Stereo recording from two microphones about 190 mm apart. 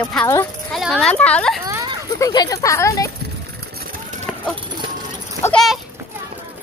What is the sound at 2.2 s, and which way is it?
Speech, 20° left (ahead or behind).